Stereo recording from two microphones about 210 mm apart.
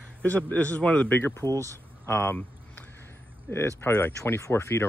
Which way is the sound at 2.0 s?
10° left (ahead or behind).